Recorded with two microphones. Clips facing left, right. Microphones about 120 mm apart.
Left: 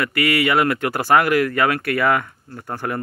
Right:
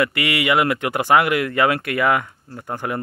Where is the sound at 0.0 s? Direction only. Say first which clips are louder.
Left 1 dB; 20° right (ahead or behind).